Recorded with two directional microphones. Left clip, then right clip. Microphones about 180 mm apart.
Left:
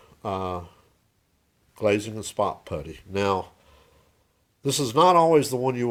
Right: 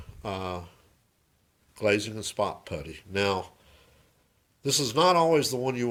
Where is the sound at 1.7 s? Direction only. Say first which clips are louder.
Left 2 dB; 25° left (ahead or behind).